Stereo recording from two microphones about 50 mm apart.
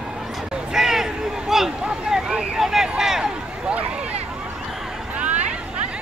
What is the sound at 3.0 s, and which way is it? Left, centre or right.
Run, centre.